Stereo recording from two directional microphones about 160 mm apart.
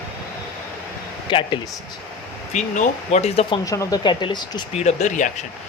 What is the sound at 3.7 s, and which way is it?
Speech, 20° left (ahead or behind).